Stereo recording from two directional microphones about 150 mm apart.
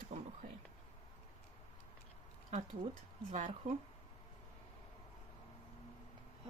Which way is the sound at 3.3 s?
55° right (ahead or behind).